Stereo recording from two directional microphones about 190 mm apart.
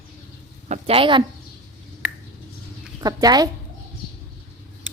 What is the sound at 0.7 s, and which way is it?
Speech, 30° right (ahead or behind).